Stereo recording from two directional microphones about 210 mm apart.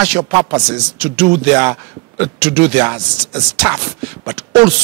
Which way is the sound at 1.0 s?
10° right (ahead or behind).